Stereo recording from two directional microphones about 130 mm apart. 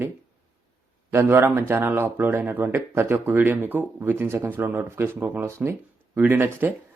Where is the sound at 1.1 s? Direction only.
20° right (ahead or behind).